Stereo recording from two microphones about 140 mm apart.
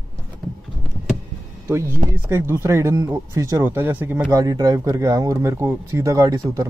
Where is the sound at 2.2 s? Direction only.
20° right (ahead or behind).